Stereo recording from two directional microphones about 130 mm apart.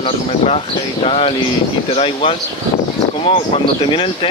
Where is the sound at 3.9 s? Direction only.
40° left (ahead or behind).